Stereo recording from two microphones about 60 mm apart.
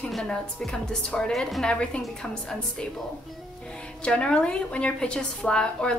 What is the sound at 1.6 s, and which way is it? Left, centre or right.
Speech, centre.